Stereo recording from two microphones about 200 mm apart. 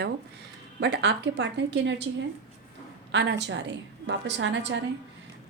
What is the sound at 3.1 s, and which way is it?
A woman's voice, 60° right (ahead or behind).